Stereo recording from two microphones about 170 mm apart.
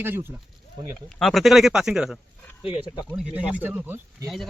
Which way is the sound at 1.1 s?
Centre (ahead or behind).